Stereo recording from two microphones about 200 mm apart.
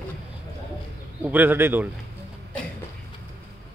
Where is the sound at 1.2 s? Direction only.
10° right (ahead or behind).